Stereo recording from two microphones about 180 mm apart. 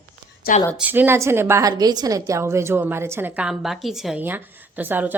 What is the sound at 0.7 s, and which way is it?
A woman's voice, 10° right (ahead or behind).